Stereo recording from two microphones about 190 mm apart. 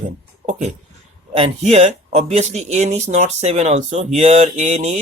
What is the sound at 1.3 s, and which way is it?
Speech, 35° right (ahead or behind).